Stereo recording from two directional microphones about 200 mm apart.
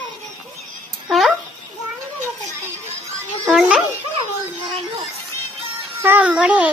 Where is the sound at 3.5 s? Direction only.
5° right (ahead or behind).